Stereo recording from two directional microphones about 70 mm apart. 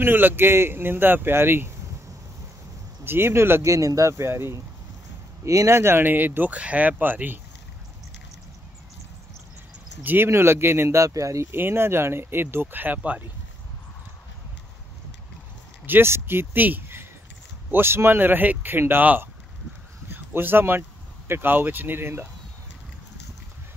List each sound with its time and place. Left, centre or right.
0.0 s speech: right
3.1 s speech: right
3.6 s speech: right
4.1 s speech: right
10.0 s speech: right
11.5 s speech: right
15.8 s speech: right
20.1 s a sound: right
21.3 s speech: right